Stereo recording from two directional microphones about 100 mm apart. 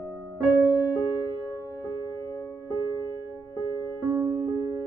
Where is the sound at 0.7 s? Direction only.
20° right (ahead or behind).